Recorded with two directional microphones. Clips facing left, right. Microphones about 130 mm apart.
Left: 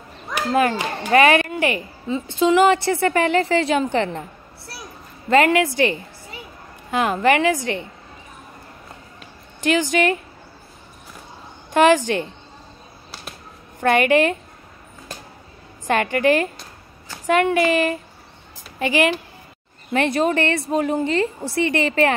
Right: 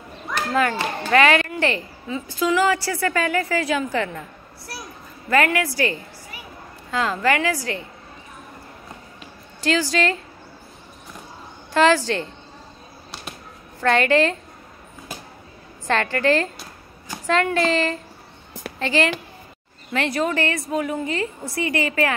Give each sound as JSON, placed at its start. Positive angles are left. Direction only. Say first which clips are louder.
{"t": 0.5, "sound": "a woman's voice", "louder": "left 3 dB", "side_deg": 25}
{"t": 2.0, "sound": "a woman's voice", "louder": "left 4 dB", "side_deg": 25}
{"t": 9.6, "sound": "a woman's voice", "louder": "left 2 dB", "side_deg": 20}
{"t": 11.7, "sound": "a woman's voice", "louder": "left 2 dB", "side_deg": 15}
{"t": 13.7, "sound": "a woman's voice", "louder": "left 2 dB", "side_deg": 15}
{"t": 15.9, "sound": "a woman's voice", "louder": "left 2 dB", "side_deg": 15}
{"t": 19.9, "sound": "a woman's voice", "louder": "left 4 dB", "side_deg": 25}